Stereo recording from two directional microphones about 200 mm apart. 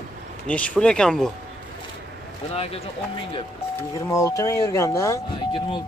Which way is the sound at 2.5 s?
30° left (ahead or behind).